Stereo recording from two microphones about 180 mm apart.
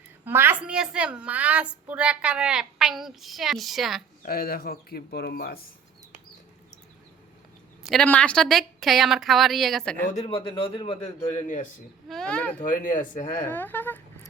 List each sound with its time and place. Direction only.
0.3 s a woman's voice: 10° right (ahead or behind)
4.3 s speech: 60° left (ahead or behind)
7.9 s a woman's voice: 5° left (ahead or behind)
10.6 s a man's voice: 30° left (ahead or behind)
12.0 s a woman's voice: 5° left (ahead or behind)
12.6 s speech: 50° left (ahead or behind)
13.5 s speech: 10° left (ahead or behind)